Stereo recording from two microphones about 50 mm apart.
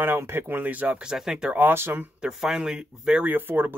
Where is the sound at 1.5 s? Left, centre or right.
Right.